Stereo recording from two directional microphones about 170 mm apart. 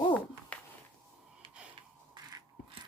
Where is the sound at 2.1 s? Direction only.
25° right (ahead or behind).